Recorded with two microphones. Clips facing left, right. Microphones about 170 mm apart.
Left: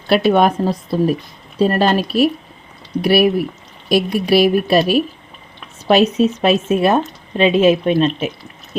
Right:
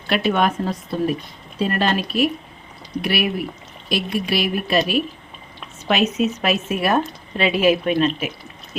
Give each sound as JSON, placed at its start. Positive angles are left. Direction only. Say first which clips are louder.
{"t": 0.1, "sound": "speech", "louder": "left 6 dB", "side_deg": 35}